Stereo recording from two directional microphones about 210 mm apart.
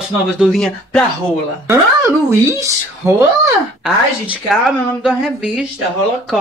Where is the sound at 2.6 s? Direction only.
15° right (ahead or behind).